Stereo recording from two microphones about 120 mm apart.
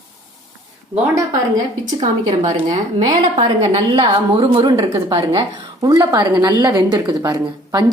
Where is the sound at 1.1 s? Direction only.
35° right (ahead or behind).